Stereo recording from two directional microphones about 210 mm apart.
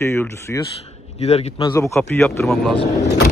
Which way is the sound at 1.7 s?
15° left (ahead or behind).